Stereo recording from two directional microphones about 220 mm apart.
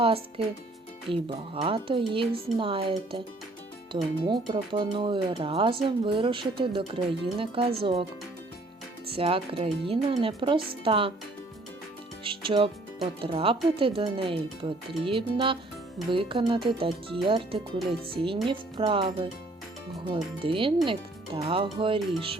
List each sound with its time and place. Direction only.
0.0 s speech: 25° right (ahead or behind)
9.0 s speech: 25° right (ahead or behind)
12.2 s speech: 25° right (ahead or behind)
20.4 s speech: 25° right (ahead or behind)